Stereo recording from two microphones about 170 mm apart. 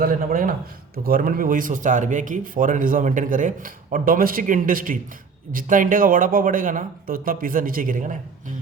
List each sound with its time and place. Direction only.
0.0 s speech: 55° right (ahead or behind)